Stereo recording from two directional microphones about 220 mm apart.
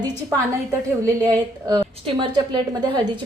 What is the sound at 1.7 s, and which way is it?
A woman's voice, 20° right (ahead or behind).